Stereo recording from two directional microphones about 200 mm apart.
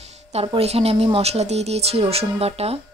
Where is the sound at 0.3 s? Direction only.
30° right (ahead or behind).